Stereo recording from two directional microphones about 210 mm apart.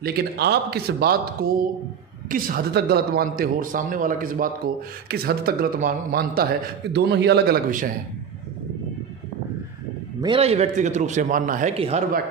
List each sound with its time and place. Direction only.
0.0 s a man's voice: 50° right (ahead or behind)
10.2 s a man's voice: 25° right (ahead or behind)